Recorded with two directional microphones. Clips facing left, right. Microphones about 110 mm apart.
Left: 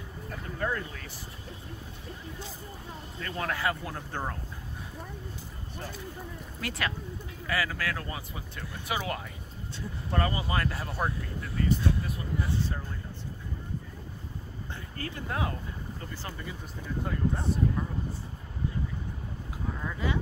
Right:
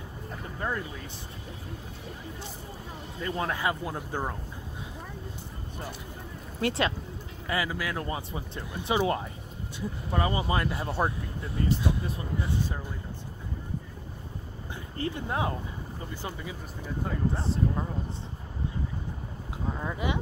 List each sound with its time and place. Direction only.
0.6 s speech: 15° right (ahead or behind)
3.2 s speech: 20° right (ahead or behind)
6.6 s speech: 30° right (ahead or behind)
9.8 s speech: 15° right (ahead or behind)
15.0 s speech: 25° right (ahead or behind)
17.0 s speech: centre (ahead or behind)
19.7 s speech: 25° right (ahead or behind)